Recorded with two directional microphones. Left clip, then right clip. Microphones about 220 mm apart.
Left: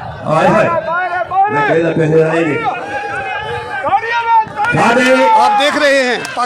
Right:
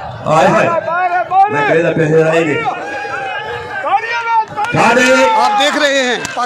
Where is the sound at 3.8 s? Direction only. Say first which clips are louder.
Left 1 dB; 35° right (ahead or behind).